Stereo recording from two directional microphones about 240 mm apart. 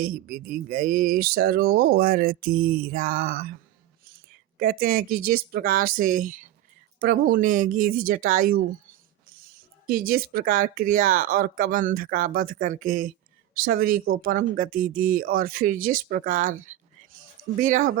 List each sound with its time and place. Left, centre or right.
0.0 s speech: right
4.5 s speech: right
9.8 s speech: right